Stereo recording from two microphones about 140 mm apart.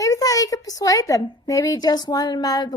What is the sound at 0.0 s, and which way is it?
A woman's voice, 25° left (ahead or behind).